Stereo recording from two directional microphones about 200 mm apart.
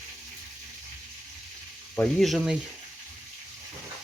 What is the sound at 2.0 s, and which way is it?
Speech, centre (ahead or behind).